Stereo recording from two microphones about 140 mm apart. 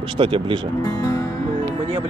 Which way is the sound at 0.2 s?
35° right (ahead or behind).